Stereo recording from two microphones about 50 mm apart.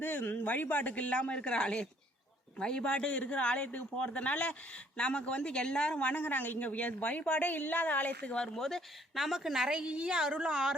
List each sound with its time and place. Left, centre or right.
0.0 s speech: left
8.5 s a woman's voice: centre